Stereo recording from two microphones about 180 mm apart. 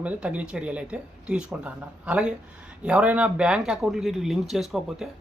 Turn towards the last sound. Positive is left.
turn(degrees=0)  # may be behind; listen again after turning